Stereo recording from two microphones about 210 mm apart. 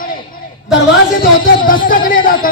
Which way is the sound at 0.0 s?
40° left (ahead or behind).